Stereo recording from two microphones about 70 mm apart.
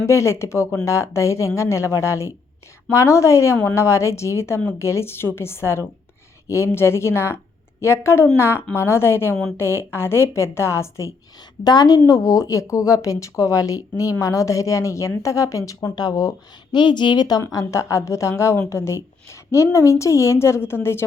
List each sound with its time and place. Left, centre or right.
0.0 s a woman's voice: left
11.6 s a woman's voice: left
12.2 s a woman's voice: left
16.0 s a woman's voice: left
16.7 s a woman's voice: left
17.5 s a woman's voice: left